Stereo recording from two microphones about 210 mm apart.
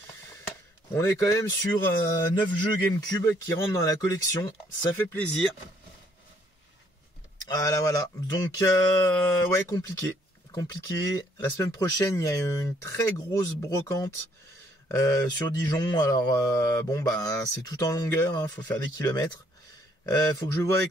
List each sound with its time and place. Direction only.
0.9 s mantra: 10° left (ahead or behind)
3.1 s mantra: 15° left (ahead or behind)
7.4 s mantra: 15° left (ahead or behind)